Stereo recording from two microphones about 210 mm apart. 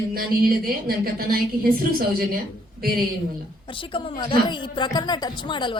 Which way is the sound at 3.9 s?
25° left (ahead or behind).